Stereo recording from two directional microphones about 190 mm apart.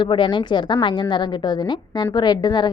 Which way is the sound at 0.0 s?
25° left (ahead or behind).